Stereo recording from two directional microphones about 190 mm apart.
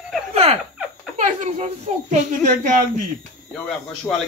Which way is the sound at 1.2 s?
35° right (ahead or behind).